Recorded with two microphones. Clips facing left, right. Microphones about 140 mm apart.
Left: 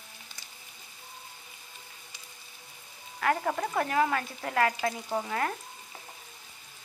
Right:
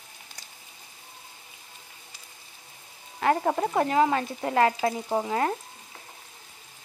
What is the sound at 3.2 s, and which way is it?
Speech, 25° right (ahead or behind).